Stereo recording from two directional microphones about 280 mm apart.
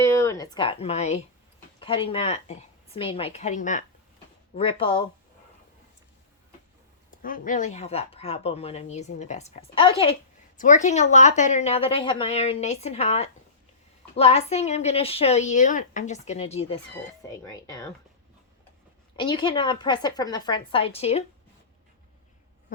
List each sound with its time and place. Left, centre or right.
0.0 s speech: centre
7.2 s a woman's voice: left; by 17.8 s centre
19.1 s a woman's voice: centre